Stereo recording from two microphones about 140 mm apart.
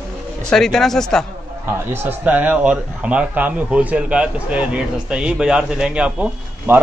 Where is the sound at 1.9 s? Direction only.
15° right (ahead or behind).